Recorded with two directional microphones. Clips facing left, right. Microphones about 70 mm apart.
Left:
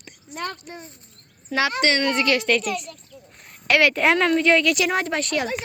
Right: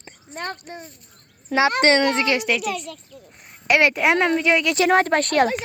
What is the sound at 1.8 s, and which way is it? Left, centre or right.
Speech, right.